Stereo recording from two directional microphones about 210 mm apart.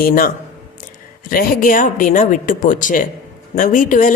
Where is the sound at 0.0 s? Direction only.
40° left (ahead or behind).